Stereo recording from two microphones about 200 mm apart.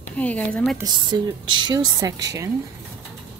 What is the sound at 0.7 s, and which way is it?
A woman's voice, 20° right (ahead or behind).